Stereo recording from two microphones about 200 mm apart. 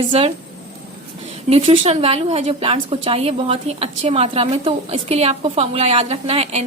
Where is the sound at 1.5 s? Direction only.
30° right (ahead or behind).